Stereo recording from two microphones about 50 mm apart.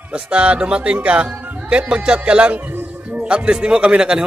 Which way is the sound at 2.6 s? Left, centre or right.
Right.